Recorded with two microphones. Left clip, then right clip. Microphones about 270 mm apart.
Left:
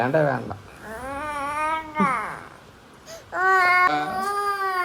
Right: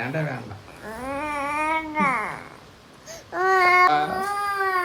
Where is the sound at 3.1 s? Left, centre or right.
Right.